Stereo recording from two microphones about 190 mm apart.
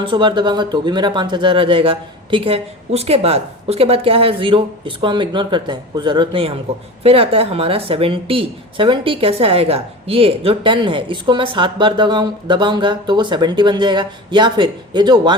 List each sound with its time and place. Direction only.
0.0 s a woman's voice: 25° right (ahead or behind)